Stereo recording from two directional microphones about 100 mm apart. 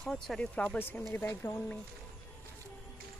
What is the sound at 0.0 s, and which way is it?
Speech, 5° left (ahead or behind).